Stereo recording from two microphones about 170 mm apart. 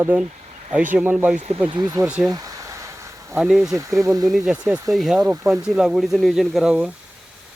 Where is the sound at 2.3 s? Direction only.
20° right (ahead or behind).